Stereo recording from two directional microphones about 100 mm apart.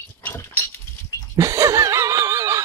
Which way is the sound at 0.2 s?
20° left (ahead or behind).